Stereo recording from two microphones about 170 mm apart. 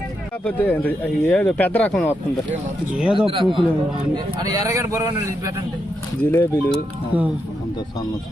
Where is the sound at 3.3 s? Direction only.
30° right (ahead or behind); by 5.5 s 15° right (ahead or behind).